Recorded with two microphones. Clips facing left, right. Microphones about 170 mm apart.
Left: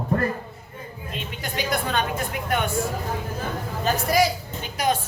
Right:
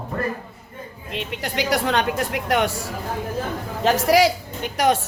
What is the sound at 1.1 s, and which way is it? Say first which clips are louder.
Speech: right 4 dB; 70° right (ahead or behind).